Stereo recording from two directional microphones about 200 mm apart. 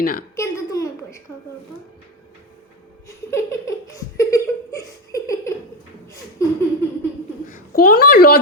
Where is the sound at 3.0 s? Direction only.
15° left (ahead or behind).